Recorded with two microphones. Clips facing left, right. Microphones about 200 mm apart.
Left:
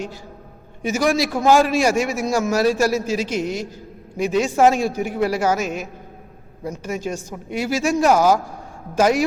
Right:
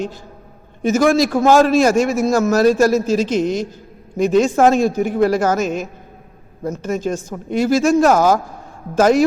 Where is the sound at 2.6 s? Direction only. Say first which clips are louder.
Right 7 dB; 40° right (ahead or behind).